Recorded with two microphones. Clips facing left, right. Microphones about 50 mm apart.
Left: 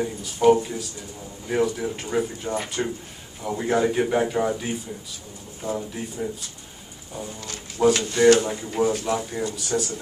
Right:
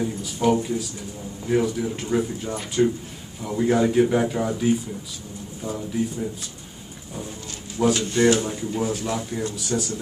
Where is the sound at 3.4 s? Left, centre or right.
Centre.